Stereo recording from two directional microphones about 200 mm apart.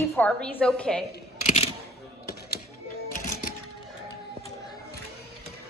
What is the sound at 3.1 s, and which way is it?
Music, 40° left (ahead or behind).